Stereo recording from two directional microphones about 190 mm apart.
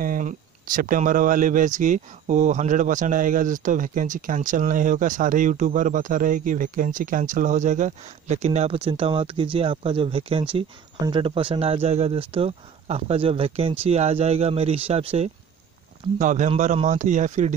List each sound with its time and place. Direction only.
0.0 s speech: 45° right (ahead or behind)